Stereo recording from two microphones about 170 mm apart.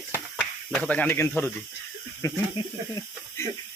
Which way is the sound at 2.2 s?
20° left (ahead or behind).